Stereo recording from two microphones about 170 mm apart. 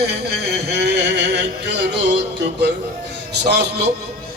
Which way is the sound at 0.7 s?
75° right (ahead or behind).